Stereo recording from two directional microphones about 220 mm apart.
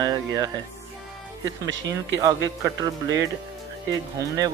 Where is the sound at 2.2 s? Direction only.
15° right (ahead or behind).